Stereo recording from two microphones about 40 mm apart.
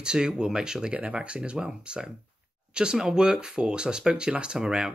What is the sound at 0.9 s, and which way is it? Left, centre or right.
Speech, right.